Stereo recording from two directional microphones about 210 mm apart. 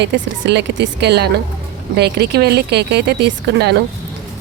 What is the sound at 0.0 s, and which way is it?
A woman's voice, 55° right (ahead or behind).